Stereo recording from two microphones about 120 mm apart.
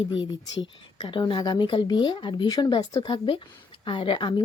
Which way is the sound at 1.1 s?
45° left (ahead or behind).